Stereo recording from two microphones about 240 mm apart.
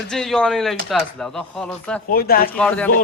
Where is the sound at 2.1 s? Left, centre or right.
Left.